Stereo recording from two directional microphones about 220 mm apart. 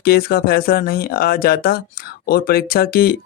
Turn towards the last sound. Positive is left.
turn(degrees=45)  # may be behind; listen again after turning